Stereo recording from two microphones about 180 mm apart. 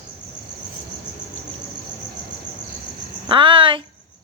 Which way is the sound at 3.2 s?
30° right (ahead or behind).